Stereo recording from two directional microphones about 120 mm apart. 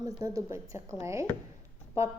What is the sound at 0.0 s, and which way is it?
A woman's voice, 30° right (ahead or behind).